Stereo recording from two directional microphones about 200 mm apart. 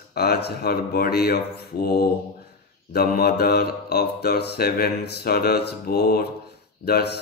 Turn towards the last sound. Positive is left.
turn(degrees=50)  # may be behind; listen again after turning